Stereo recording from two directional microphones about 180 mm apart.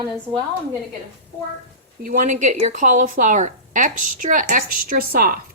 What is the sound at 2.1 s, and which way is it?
A woman's voice, 45° right (ahead or behind).